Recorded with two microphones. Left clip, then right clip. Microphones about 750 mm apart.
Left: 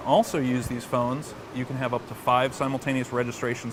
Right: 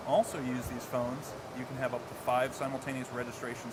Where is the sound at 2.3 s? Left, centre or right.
Left.